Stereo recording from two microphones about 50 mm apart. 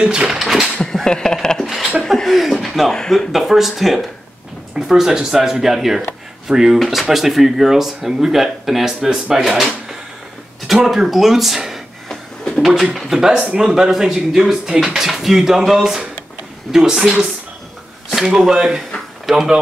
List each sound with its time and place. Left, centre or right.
0.0 s speech: centre
0.3 s a sound: centre
0.9 s a sound: centre
2.0 s chuckle: centre
2.9 s speech: centre
3.3 s speech: centre
10.7 s speech: centre
12.1 s a sound: centre
12.9 s speech: centre